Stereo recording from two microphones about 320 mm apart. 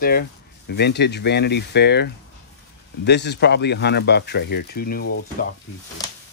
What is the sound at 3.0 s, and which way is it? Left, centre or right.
Speech, left.